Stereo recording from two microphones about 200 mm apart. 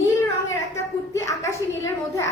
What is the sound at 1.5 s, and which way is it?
Speech, 15° left (ahead or behind).